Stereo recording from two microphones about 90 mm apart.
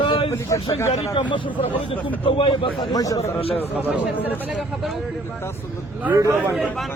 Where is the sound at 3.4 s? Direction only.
90° left.